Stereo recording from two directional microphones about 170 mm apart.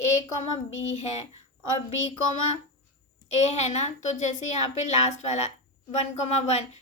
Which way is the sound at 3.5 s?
40° left (ahead or behind).